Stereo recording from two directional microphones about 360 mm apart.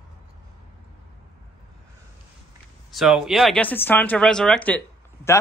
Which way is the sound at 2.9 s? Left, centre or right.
Centre.